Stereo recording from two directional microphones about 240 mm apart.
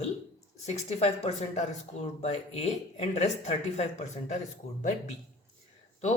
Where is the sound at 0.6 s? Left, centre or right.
Left.